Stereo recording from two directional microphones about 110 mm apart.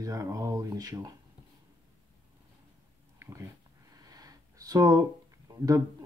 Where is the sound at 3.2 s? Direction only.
25° right (ahead or behind).